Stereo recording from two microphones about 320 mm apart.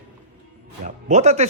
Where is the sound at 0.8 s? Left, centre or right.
Right.